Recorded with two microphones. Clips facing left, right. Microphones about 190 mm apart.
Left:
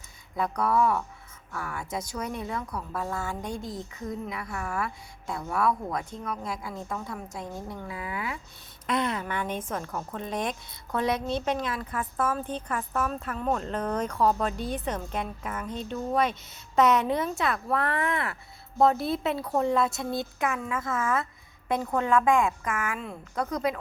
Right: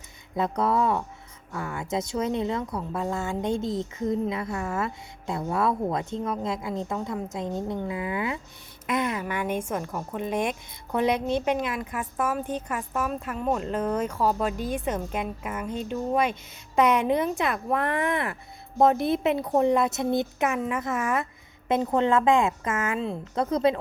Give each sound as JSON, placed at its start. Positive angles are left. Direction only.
{"t": 0.3, "sound": "speech", "side_deg": -25}
{"t": 8.9, "sound": "a woman's voice", "side_deg": -10}